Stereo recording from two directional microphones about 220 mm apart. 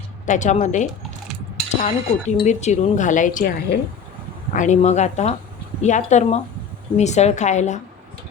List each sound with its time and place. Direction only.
0.3 s speech: 35° left (ahead or behind)